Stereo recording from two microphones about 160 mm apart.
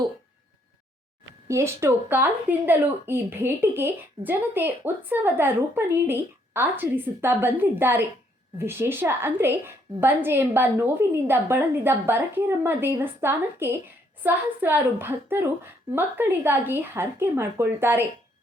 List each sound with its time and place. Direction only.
1.5 s speech: 15° right (ahead or behind)